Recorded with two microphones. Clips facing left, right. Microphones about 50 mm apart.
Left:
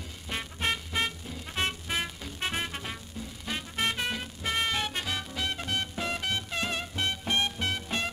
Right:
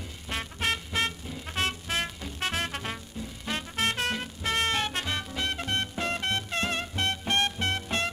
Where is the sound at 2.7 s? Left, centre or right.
Centre.